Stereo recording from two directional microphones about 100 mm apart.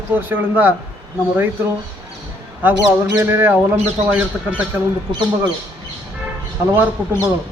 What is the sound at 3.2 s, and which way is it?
A man's voice, 20° right (ahead or behind).